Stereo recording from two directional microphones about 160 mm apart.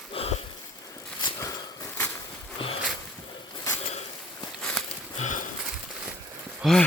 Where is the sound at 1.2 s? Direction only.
25° left (ahead or behind).